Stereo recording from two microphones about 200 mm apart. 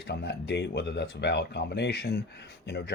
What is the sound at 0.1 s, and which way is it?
Speech, 60° left (ahead or behind).